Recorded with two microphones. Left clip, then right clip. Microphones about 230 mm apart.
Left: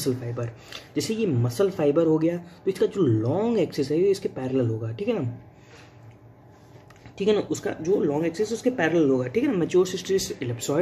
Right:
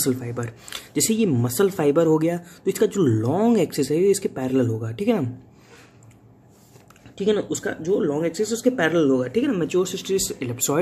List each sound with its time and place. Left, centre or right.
0.0 s speech: right
7.2 s speech: centre; by 10.8 s right